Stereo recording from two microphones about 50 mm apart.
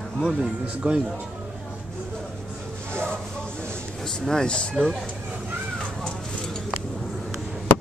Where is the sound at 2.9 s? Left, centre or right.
Left.